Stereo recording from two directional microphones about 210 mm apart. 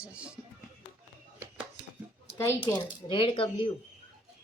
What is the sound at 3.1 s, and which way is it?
Speech, 25° left (ahead or behind).